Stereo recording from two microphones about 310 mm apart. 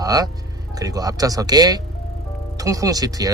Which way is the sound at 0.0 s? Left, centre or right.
Centre.